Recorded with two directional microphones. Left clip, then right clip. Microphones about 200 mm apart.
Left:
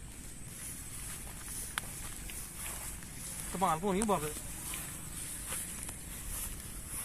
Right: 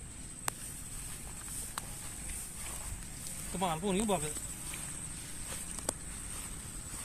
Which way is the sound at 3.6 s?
20° right (ahead or behind).